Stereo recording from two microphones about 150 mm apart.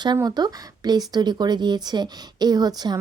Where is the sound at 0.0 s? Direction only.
30° right (ahead or behind).